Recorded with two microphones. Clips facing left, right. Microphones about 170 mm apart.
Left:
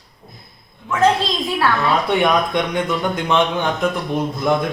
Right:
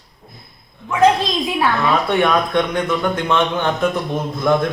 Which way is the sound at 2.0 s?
15° left (ahead or behind).